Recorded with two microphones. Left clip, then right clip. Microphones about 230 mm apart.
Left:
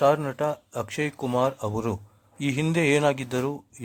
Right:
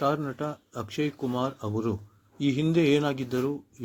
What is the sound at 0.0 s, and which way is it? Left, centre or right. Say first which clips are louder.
Speech: left 6 dB; left.